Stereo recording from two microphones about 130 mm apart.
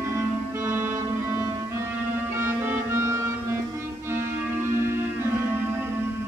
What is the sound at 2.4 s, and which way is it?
Music, 20° right (ahead or behind).